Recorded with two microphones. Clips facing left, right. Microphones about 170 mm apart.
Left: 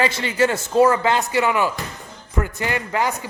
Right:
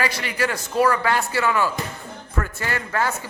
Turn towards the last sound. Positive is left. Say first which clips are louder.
# left 2 dB
turn(degrees=15)  # may be behind; listen again after turning